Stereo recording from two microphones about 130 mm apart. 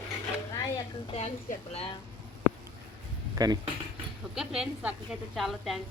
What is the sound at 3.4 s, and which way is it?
Speech, 30° right (ahead or behind).